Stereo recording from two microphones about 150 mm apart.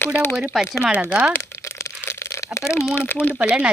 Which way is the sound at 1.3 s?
15° left (ahead or behind).